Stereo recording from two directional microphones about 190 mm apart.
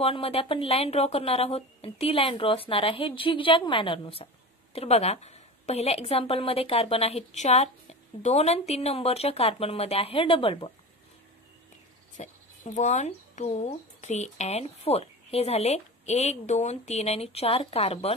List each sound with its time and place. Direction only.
0.0 s a woman's voice: 30° left (ahead or behind)
12.2 s speech: 40° left (ahead or behind)